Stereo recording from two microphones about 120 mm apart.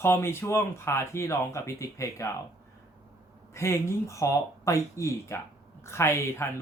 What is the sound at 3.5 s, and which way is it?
Speech, 25° left (ahead or behind).